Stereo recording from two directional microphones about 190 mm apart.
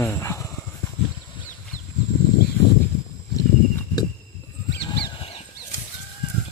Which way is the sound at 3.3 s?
20° left (ahead or behind).